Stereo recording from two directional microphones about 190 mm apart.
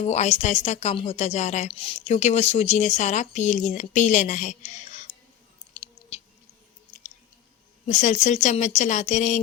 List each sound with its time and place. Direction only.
0.0 s a woman's voice: 35° left (ahead or behind)
7.9 s a woman's voice: 40° left (ahead or behind)